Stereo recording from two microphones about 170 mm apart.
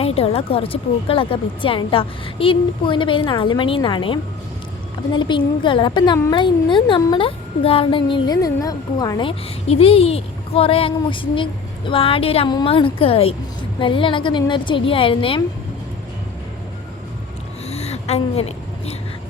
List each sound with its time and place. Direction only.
0.0 s a woman's voice: 35° left (ahead or behind)
9.6 s a woman's voice: 35° left (ahead or behind)
17.7 s a sound: 40° left (ahead or behind)